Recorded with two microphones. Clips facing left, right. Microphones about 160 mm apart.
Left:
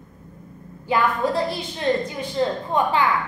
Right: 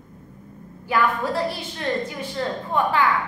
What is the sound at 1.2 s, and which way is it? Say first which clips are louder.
A woman's voice: left 2 dB; 20° left (ahead or behind).